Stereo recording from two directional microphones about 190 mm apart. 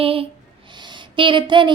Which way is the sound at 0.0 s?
30° right (ahead or behind).